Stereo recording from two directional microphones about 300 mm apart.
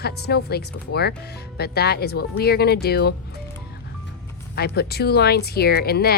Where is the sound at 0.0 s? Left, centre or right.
Left.